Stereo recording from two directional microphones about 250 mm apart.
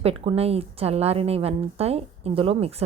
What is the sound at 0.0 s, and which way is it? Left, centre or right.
A woman's voice, right.